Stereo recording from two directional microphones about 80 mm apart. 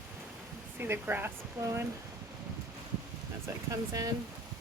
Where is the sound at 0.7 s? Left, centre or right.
Right.